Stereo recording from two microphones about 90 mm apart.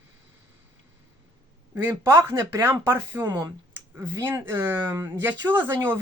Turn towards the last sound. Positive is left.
turn(degrees=-25)  # may be behind; listen again after turning